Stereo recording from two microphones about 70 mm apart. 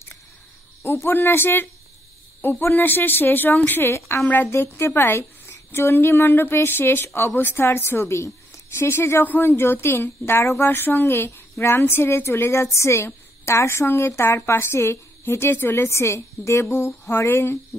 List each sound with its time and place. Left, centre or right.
0.8 s a woman's voice: left